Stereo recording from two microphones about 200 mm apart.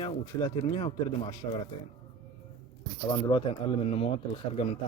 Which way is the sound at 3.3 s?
25° left (ahead or behind).